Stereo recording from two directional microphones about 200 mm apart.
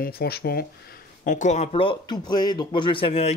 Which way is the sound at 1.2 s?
40° left (ahead or behind).